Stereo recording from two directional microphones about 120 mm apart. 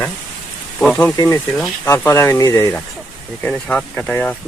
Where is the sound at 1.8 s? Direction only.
20° left (ahead or behind).